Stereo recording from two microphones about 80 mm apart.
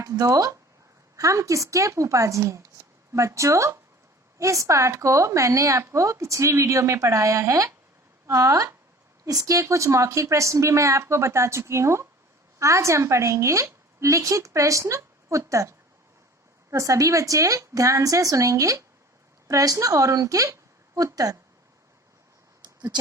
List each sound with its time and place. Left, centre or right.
0.0 s a woman's voice: right
1.1 s a woman's voice: right
16.7 s a woman's voice: right
22.6 s a sound: right